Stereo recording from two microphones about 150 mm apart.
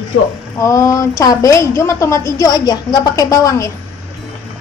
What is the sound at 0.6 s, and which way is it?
Speech, 20° left (ahead or behind).